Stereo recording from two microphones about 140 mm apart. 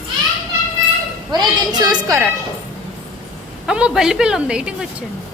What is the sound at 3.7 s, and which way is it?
Speech, 5° right (ahead or behind).